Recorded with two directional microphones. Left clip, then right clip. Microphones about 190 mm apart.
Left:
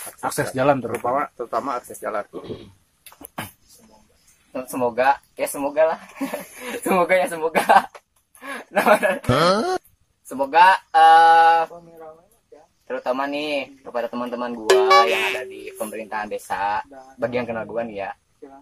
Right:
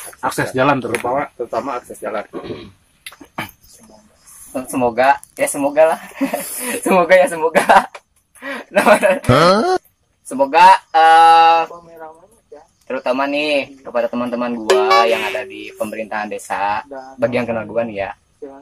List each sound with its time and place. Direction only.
0.0 s a sound: 50° left (ahead or behind)
1.0 s speech: 10° left (ahead or behind)
4.5 s a man's voice: centre (ahead or behind)
12.8 s a man's voice: 5° left (ahead or behind)